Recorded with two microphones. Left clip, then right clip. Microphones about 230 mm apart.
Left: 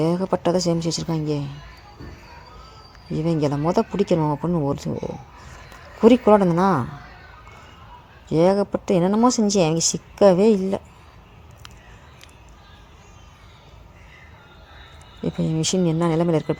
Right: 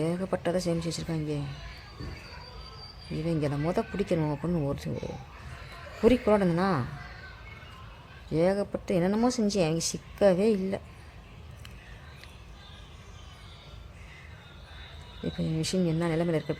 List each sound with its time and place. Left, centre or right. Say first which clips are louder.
0.0 s speech: left 9 dB; centre
3.2 s speech: left 8 dB; centre
6.0 s speech: left 9 dB; centre
8.3 s speech: left 8 dB; centre
15.2 s speech: left 8 dB; centre